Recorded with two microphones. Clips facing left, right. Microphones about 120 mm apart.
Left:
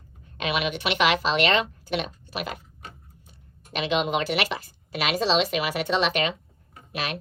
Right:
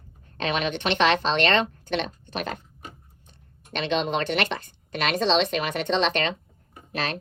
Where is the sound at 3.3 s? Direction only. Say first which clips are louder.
Right 1 dB; 5° left (ahead or behind).